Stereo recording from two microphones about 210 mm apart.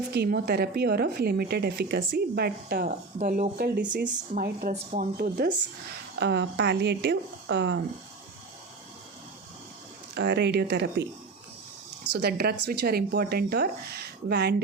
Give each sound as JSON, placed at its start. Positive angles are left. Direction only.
{"t": 0.1, "sound": "speech", "side_deg": -50}
{"t": 3.2, "sound": "speech", "side_deg": -35}
{"t": 4.7, "sound": "speech", "side_deg": -30}
{"t": 5.1, "sound": "speech", "side_deg": -45}
{"t": 6.1, "sound": "speech", "side_deg": -55}
{"t": 10.2, "sound": "speech", "side_deg": -55}
{"t": 12.1, "sound": "speech", "side_deg": -50}